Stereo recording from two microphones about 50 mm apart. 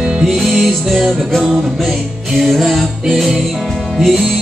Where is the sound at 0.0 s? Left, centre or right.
Centre.